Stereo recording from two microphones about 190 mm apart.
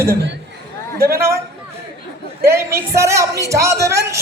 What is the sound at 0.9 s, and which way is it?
Speech, 55° right (ahead or behind).